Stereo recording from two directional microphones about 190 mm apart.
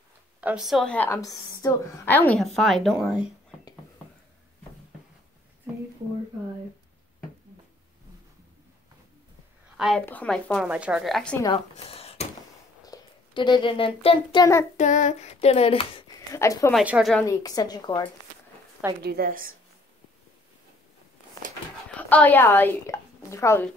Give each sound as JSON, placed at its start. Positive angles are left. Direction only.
{"t": 0.4, "sound": "a woman's voice", "side_deg": -5}
{"t": 9.8, "sound": "a woman's voice", "side_deg": 0}
{"t": 11.5, "sound": "a sound", "side_deg": 30}
{"t": 12.8, "sound": "a child's voice", "side_deg": 20}
{"t": 14.8, "sound": "speech", "side_deg": 40}
{"t": 16.3, "sound": "speech", "side_deg": 15}
{"t": 16.7, "sound": "a woman's voice", "side_deg": -5}
{"t": 17.2, "sound": "a woman's voice", "side_deg": 15}
{"t": 19.0, "sound": "a woman's voice", "side_deg": -50}
{"t": 21.9, "sound": "speech", "side_deg": 10}